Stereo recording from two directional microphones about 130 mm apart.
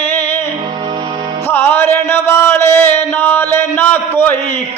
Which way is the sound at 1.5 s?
15° left (ahead or behind).